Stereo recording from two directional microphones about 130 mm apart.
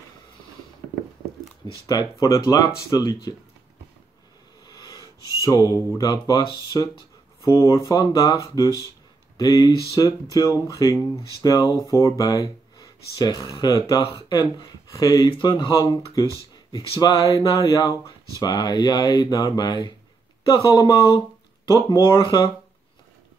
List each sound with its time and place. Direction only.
1.9 s speech: 30° left (ahead or behind)
4.6 s a sound: 30° left (ahead or behind)
6.2 s speech: 30° left (ahead or behind)